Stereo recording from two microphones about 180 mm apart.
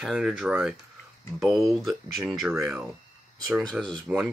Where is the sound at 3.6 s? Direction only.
Centre (ahead or behind).